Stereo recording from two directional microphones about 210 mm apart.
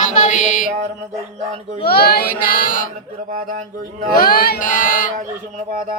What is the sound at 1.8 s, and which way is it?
Child singing, 45° left (ahead or behind).